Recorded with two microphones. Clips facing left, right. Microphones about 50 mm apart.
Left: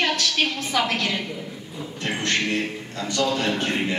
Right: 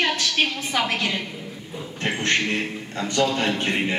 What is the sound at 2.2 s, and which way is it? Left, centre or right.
A man's voice, right.